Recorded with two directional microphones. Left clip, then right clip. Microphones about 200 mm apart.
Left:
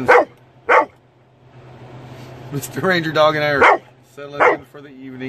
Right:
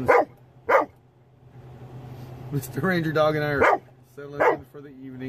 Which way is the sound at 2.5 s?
20° left (ahead or behind).